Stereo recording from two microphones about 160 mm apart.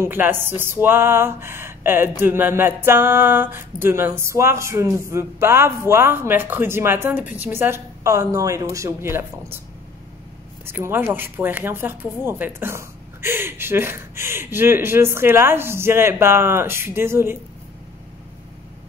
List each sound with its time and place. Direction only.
0.0 s speech: 15° right (ahead or behind)
10.6 s speech: 15° right (ahead or behind)